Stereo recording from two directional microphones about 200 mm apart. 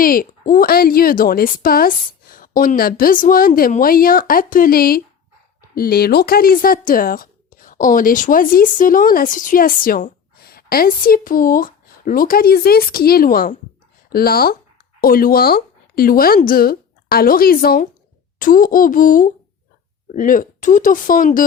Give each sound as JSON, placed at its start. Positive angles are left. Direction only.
{"t": 0.0, "sound": "speech", "side_deg": 45}